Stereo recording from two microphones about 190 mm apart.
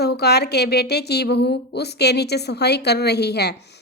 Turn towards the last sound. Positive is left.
turn(degrees=60)  # may be behind; listen again after turning